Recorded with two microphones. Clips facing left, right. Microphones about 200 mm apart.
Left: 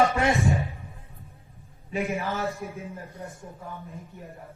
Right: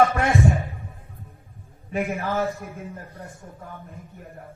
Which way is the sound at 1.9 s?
50° right (ahead or behind).